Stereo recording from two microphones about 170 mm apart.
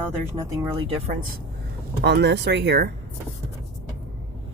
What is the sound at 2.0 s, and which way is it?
Speech, 80° right.